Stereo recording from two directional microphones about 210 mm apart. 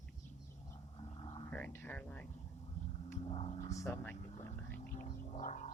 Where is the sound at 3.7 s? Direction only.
15° left (ahead or behind).